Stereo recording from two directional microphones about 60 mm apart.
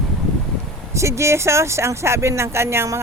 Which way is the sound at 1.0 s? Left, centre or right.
Right.